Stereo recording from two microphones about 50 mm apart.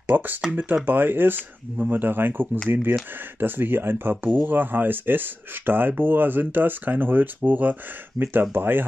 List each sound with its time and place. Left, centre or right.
0.0 s speech: right